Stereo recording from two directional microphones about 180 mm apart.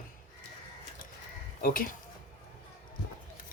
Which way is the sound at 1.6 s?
50° left (ahead or behind).